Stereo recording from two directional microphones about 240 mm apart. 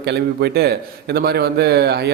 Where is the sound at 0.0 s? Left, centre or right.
Right.